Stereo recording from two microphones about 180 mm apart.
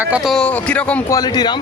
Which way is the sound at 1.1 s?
20° left (ahead or behind).